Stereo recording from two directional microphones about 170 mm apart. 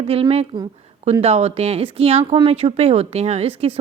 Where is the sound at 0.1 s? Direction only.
35° right (ahead or behind).